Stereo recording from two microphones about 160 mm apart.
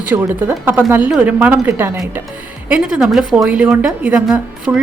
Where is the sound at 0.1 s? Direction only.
15° right (ahead or behind).